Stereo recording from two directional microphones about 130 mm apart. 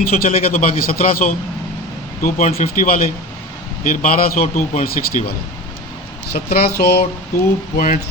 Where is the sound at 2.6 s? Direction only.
90° left.